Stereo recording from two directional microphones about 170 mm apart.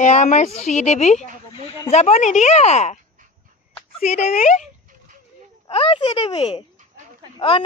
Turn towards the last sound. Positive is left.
turn(degrees=30)  # may be behind; listen again after turning